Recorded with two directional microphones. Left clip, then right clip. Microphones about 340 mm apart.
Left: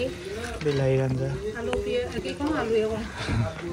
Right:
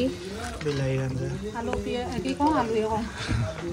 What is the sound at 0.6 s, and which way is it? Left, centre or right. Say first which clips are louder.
Speech: left 5 dB; centre.